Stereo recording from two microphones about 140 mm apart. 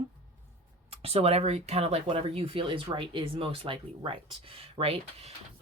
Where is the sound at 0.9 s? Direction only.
45° right (ahead or behind).